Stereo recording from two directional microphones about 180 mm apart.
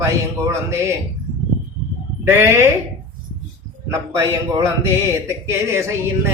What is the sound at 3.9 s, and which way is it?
Speech, 20° right (ahead or behind).